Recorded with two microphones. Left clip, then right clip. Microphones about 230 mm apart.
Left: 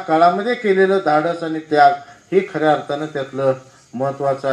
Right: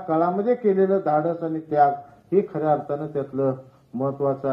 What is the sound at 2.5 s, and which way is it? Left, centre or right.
Speech, left.